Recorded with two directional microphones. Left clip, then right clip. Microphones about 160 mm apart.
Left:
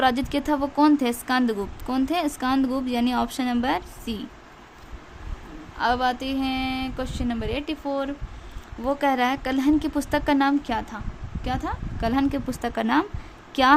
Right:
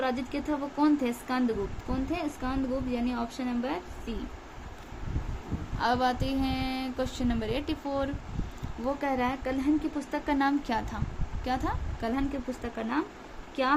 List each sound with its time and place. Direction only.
0.0 s a woman's voice: 50° left (ahead or behind)
5.8 s speech: 30° left (ahead or behind)
8.8 s speech: 45° left (ahead or behind)
10.3 s a woman's voice: 35° left (ahead or behind)
12.1 s a woman's voice: 50° left (ahead or behind)